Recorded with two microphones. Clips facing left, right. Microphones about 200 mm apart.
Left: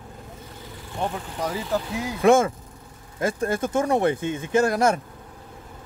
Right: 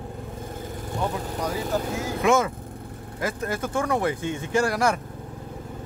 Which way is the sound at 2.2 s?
30° left (ahead or behind).